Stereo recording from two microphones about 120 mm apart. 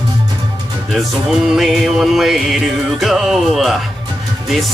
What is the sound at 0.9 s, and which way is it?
Music, centre (ahead or behind).